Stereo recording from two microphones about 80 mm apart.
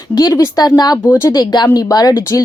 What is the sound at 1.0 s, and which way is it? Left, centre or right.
Speech, left.